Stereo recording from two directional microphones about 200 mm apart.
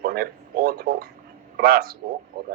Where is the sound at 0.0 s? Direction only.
50° right (ahead or behind).